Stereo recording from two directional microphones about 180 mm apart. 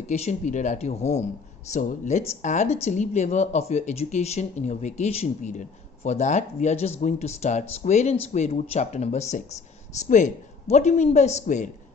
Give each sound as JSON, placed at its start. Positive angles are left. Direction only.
{"t": 0.0, "sound": "speech", "side_deg": 40}